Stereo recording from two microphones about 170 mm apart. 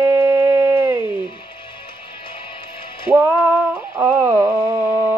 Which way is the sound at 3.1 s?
10° right (ahead or behind).